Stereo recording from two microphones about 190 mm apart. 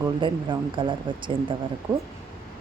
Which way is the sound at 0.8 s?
25° right (ahead or behind).